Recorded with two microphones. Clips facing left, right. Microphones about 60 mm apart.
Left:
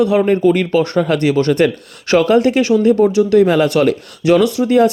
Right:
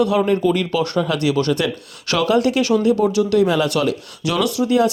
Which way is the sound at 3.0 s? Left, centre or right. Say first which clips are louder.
Left 5 dB; left.